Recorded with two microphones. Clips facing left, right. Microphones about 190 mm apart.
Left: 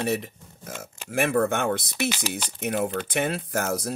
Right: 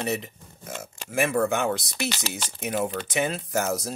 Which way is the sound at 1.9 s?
5° left (ahead or behind).